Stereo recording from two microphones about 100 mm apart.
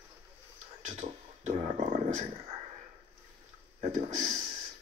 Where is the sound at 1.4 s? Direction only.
90° right.